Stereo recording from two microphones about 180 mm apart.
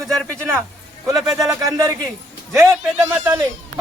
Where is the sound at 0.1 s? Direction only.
5° left (ahead or behind).